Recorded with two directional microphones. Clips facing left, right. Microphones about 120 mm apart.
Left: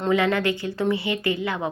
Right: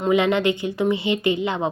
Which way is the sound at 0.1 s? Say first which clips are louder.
Right 3 dB; 20° right (ahead or behind).